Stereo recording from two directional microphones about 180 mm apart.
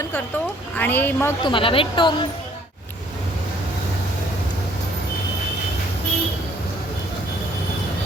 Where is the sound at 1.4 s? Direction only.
25° left (ahead or behind).